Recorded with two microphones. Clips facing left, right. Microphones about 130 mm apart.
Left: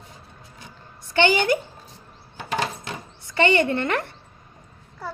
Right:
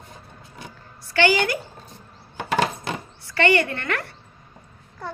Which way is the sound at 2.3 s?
75° right (ahead or behind).